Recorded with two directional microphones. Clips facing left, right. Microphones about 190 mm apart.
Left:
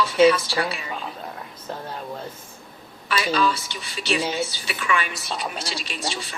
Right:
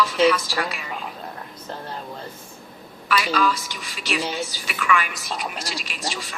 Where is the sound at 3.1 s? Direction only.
30° left (ahead or behind).